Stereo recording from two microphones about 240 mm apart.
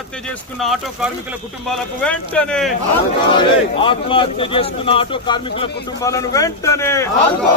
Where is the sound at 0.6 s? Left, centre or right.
Centre.